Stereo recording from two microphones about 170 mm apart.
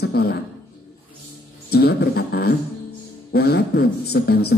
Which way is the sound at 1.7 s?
70° left (ahead or behind).